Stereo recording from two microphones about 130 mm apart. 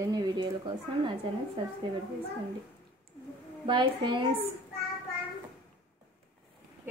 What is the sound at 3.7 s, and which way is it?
Speech, 40° right (ahead or behind).